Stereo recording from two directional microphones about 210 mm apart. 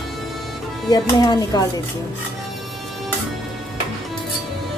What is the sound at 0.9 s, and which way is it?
Speech, 20° left (ahead or behind).